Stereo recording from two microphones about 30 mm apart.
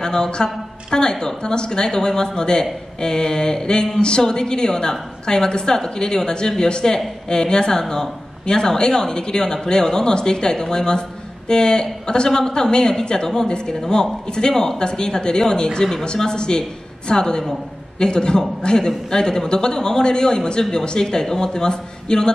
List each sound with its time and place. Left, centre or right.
0.0 s speech: left
14.5 s speech: centre
14.8 s speech: left